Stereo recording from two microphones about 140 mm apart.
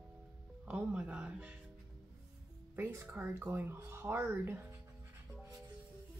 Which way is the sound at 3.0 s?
10° right (ahead or behind).